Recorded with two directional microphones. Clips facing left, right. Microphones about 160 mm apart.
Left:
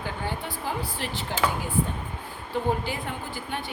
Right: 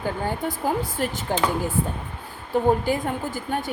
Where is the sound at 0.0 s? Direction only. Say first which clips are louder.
Right 6 dB; 45° right (ahead or behind).